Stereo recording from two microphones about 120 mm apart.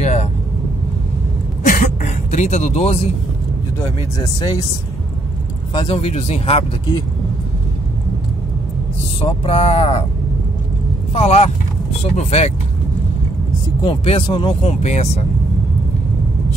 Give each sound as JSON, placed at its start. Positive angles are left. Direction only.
{"t": 0.0, "sound": "vehicle", "side_deg": 75}
{"t": 1.7, "sound": "a sound", "side_deg": 85}
{"t": 4.2, "sound": "speech", "side_deg": 40}
{"t": 5.7, "sound": "speech", "side_deg": 40}
{"t": 5.9, "sound": "speech", "side_deg": 60}
{"t": 9.2, "sound": "speech", "side_deg": 55}
{"t": 11.1, "sound": "speech", "side_deg": 60}
{"t": 13.8, "sound": "speech", "side_deg": 50}
{"t": 14.6, "sound": "speech", "side_deg": 65}